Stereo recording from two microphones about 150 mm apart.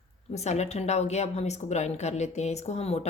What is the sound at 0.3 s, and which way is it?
A woman's voice, 50° left (ahead or behind).